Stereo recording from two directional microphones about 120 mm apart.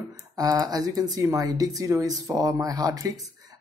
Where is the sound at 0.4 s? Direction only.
30° right (ahead or behind).